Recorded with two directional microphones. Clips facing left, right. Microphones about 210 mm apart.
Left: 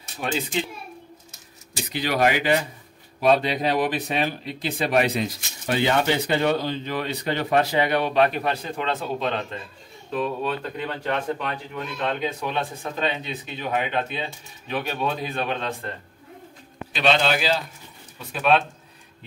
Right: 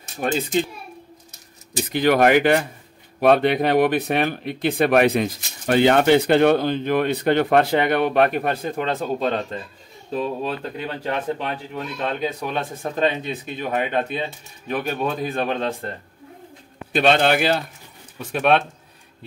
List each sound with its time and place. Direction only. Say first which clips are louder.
0.2 s speech: right 5 dB; 45° right (ahead or behind)
1.8 s speech: right 6 dB; 55° right (ahead or behind)
10.1 s speech: right 1 dB; 35° right (ahead or behind)
16.9 s speech: right 4 dB; 50° right (ahead or behind)